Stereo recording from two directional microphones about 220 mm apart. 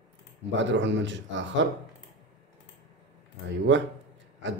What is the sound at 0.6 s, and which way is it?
Speech, 55° right (ahead or behind).